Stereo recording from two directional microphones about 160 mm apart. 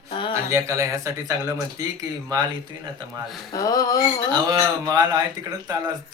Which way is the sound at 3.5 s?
20° left (ahead or behind).